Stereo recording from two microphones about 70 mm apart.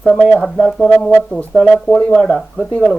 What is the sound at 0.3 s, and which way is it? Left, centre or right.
Speech, centre.